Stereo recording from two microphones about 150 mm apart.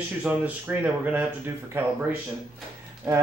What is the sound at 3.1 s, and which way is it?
Speech, 20° right (ahead or behind).